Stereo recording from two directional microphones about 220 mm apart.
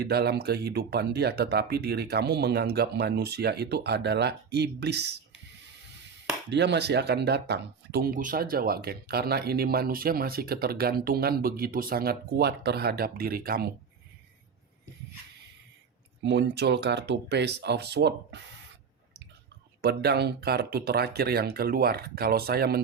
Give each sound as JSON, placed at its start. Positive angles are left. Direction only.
{"t": 0.0, "sound": "speech", "side_deg": -45}
{"t": 6.5, "sound": "speech", "side_deg": -50}
{"t": 16.2, "sound": "speech", "side_deg": -50}
{"t": 19.8, "sound": "speech", "side_deg": -45}